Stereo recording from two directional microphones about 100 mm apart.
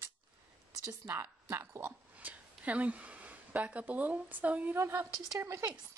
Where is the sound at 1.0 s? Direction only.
25° right (ahead or behind).